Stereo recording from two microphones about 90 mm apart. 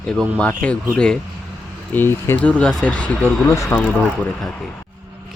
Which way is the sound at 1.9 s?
25° left (ahead or behind).